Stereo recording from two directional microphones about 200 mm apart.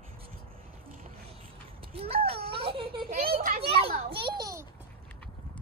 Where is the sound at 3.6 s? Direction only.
30° right (ahead or behind).